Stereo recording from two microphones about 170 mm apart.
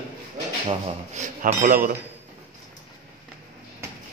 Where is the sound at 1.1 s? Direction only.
45° right (ahead or behind).